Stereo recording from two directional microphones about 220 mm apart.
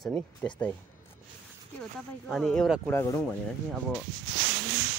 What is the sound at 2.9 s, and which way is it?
Speech, 10° left (ahead or behind).